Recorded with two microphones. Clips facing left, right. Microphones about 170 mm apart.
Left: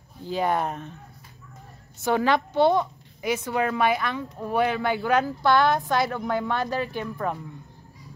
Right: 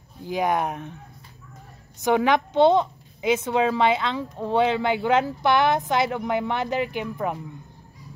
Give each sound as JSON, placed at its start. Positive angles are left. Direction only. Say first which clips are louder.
{"t": 0.2, "sound": "speech", "louder": "right 1 dB", "side_deg": -15}
{"t": 2.0, "sound": "a woman's voice", "louder": "right 2 dB", "side_deg": -15}